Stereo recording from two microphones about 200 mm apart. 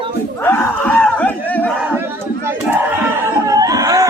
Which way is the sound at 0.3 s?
10° left (ahead or behind).